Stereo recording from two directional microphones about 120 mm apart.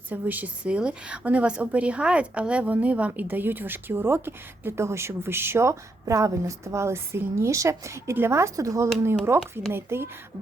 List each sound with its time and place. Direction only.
0.1 s a woman's voice: 15° right (ahead or behind)